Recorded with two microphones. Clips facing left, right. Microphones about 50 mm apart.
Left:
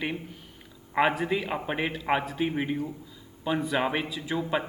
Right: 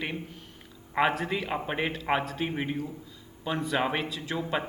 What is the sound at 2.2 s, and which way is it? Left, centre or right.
Speech, centre.